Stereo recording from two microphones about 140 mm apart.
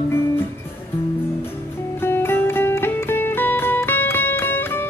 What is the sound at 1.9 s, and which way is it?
Music, 15° left (ahead or behind).